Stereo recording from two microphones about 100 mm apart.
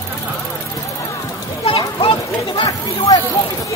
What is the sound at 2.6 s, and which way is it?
Speech, 35° left (ahead or behind).